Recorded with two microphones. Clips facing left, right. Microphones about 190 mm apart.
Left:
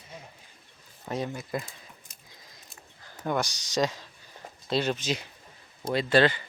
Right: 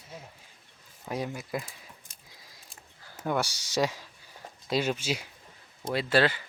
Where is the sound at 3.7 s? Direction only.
10° right (ahead or behind).